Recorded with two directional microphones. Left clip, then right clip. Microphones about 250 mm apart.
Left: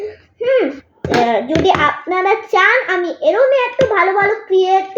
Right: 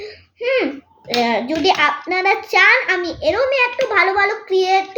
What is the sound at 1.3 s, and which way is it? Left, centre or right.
Speech, right.